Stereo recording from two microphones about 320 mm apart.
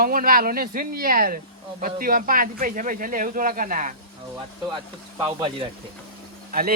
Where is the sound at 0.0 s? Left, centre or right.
Right.